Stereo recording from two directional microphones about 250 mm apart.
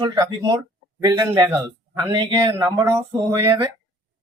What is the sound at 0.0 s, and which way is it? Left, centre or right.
Speech, centre.